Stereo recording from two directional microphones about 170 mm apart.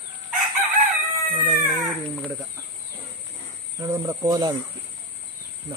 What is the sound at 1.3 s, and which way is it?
Cat, 10° right (ahead or behind).